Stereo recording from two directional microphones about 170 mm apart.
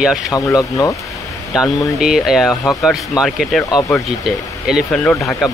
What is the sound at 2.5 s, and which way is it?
Speech, 20° left (ahead or behind).